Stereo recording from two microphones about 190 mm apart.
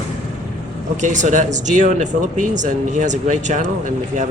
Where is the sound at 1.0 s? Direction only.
40° right (ahead or behind).